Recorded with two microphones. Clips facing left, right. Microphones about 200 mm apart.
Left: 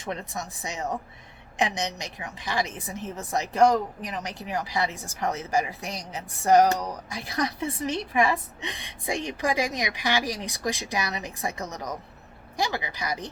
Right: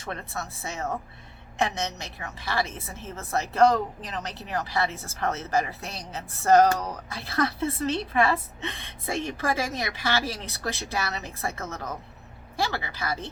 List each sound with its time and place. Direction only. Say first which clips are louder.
0.0 s a woman's voice: left 2 dB; 15° left (ahead or behind)